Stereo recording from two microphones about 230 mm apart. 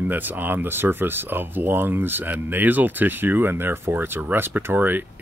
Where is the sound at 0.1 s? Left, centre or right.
Centre.